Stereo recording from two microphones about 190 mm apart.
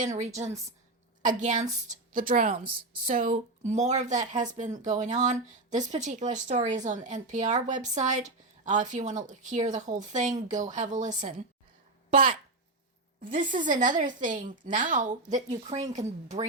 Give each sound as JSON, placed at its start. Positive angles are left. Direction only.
{"t": 0.0, "sound": "a woman's voice", "side_deg": -40}